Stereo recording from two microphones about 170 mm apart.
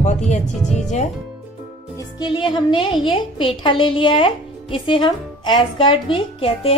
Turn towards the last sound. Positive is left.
turn(degrees=35)  # may be behind; listen again after turning